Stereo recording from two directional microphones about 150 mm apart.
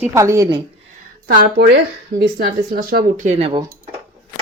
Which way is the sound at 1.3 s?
85° right.